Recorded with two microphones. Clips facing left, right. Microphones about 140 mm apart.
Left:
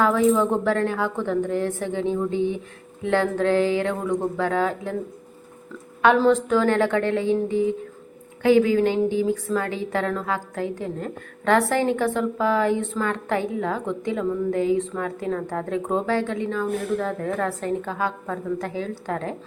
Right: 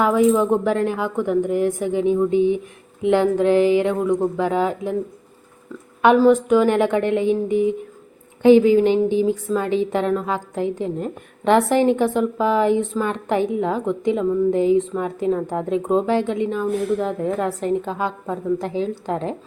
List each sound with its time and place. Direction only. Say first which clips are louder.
0.0 s a woman's voice: right 3 dB; 15° right (ahead or behind)
6.0 s a woman's voice: right 4 dB; 15° right (ahead or behind)